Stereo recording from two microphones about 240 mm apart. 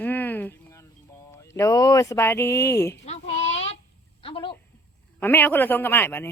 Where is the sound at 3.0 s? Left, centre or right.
Left.